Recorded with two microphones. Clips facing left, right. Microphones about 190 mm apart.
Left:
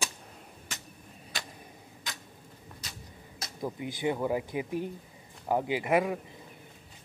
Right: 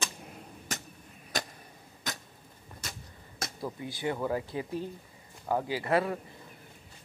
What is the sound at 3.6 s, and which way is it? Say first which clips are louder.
Speech: left 3 dB; 15° left (ahead or behind).